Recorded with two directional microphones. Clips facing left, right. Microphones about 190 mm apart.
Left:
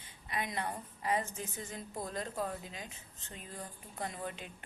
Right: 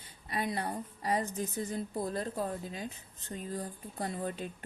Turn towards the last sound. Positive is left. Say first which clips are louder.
# right 5 dB
turn(degrees=-35)  # may be behind; listen again after turning